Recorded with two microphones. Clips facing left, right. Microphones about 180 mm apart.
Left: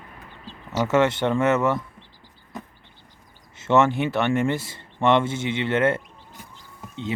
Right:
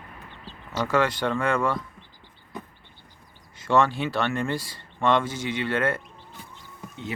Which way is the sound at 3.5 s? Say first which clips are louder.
Left 3 dB; 25° left (ahead or behind).